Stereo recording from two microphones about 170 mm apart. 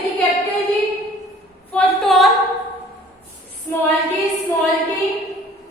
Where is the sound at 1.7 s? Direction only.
5° left (ahead or behind).